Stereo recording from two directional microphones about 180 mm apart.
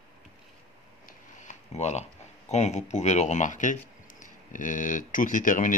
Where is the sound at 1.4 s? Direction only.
40° left (ahead or behind).